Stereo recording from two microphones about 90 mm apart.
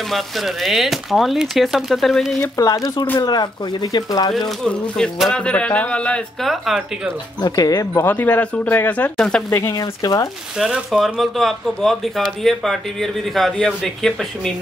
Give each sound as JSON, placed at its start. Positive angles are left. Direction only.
{"t": 0.1, "sound": "speech", "side_deg": 0}
{"t": 2.4, "sound": "speech", "side_deg": 40}
{"t": 4.6, "sound": "speech", "side_deg": 10}
{"t": 6.4, "sound": "speech", "side_deg": 0}
{"t": 7.4, "sound": "speech", "side_deg": 40}
{"t": 8.0, "sound": "speech", "side_deg": 20}
{"t": 9.1, "sound": "speech", "side_deg": 5}
{"t": 9.5, "sound": "speech", "side_deg": 30}
{"t": 9.8, "sound": "speech", "side_deg": 45}
{"t": 10.6, "sound": "speech", "side_deg": -5}